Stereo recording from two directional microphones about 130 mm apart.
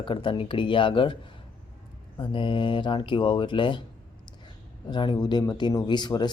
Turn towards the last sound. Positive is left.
turn(degrees=35)  # may be behind; listen again after turning